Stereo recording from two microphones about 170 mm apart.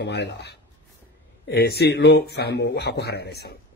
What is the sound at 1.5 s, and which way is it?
Speech, 70° left (ahead or behind).